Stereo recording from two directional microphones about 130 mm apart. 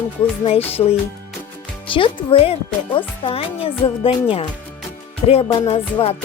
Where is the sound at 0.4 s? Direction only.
50° left (ahead or behind).